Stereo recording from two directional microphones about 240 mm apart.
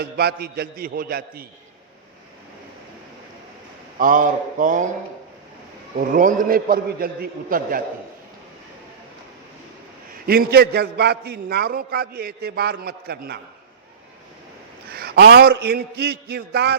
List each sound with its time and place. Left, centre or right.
0.0 s a man's voice: right
3.9 s a man's voice: right
6.0 s a man's voice: right
10.2 s a man's voice: right
14.8 s a man's voice: right